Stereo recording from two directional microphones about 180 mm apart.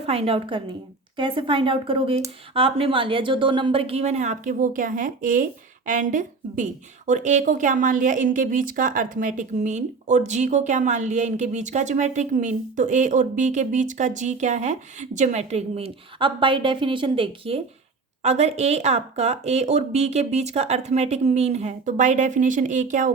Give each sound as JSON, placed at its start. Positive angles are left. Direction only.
{"t": 0.0, "sound": "a woman's voice", "side_deg": -30}